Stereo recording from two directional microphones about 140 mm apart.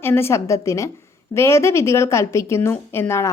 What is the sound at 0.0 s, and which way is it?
A woman's voice, 15° left (ahead or behind).